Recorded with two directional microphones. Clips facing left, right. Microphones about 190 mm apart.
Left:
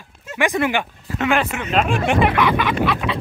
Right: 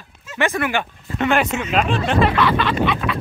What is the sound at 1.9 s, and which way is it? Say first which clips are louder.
Speech: left 1 dB; 15° left (ahead or behind).